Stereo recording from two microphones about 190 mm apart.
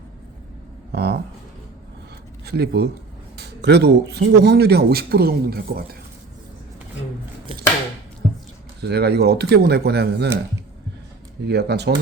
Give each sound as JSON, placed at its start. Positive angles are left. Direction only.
{"t": 0.9, "sound": "a man's voice", "side_deg": -60}
{"t": 2.4, "sound": "speech", "side_deg": -60}
{"t": 3.3, "sound": "a sound", "side_deg": -60}
{"t": 4.4, "sound": "a man's voice", "side_deg": -60}
{"t": 8.8, "sound": "a man's voice", "side_deg": -60}
{"t": 11.4, "sound": "a man's voice", "side_deg": -60}